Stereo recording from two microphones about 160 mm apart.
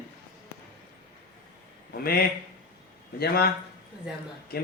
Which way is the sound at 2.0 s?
75° left (ahead or behind).